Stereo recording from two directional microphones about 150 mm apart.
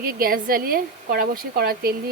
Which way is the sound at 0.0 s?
85° right.